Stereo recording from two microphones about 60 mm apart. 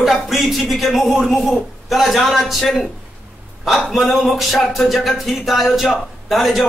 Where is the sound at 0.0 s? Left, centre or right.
Centre.